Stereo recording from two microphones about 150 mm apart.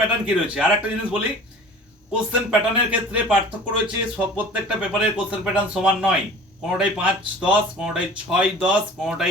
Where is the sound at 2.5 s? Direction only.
5° right (ahead or behind).